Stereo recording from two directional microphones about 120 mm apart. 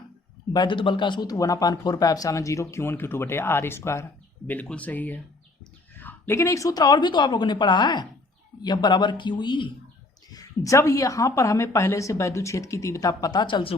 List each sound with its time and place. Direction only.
0.5 s speech: 40° left (ahead or behind)
10.3 s speech: 25° left (ahead or behind); by 13.7 s 45° left (ahead or behind)